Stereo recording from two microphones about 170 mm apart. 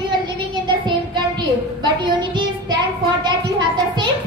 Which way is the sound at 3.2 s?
25° right (ahead or behind).